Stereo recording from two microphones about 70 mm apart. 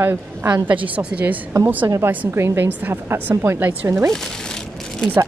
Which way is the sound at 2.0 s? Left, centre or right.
Right.